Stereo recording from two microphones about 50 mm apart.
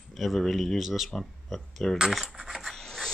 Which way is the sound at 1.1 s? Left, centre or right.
Centre.